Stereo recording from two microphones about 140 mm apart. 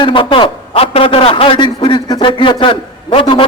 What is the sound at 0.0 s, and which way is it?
A man's voice, 40° left (ahead or behind).